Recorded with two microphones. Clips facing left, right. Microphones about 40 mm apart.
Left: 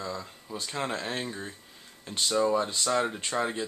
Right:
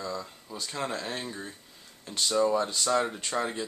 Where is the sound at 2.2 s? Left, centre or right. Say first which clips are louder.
Even; centre.